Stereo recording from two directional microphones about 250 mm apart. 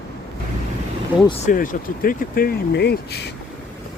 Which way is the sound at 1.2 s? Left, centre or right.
Left.